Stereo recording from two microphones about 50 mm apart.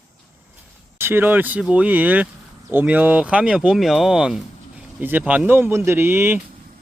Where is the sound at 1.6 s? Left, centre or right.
Right.